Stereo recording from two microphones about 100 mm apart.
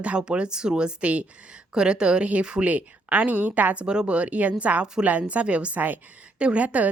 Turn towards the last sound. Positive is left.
turn(degrees=-15)  # may be behind; listen again after turning